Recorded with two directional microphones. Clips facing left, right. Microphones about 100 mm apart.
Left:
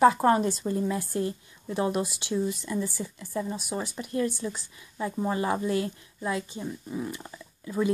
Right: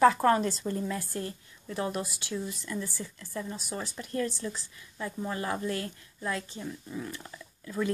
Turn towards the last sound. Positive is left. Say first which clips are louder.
# left 4 dB
turn(degrees=15)  # may be behind; listen again after turning